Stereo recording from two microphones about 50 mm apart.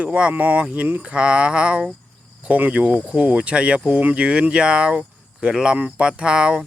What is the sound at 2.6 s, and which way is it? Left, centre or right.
Speech, right.